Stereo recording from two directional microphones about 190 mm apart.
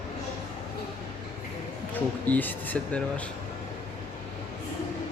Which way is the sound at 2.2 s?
10° left (ahead or behind).